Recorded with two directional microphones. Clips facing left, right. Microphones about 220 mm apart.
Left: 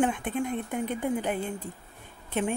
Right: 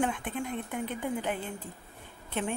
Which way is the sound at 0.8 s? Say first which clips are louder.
Left 4 dB; 45° left (ahead or behind).